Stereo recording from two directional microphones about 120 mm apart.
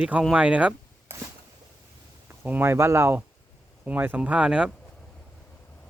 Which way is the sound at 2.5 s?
20° right (ahead or behind).